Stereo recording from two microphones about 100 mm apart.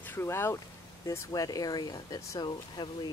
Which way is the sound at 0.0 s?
20° left (ahead or behind).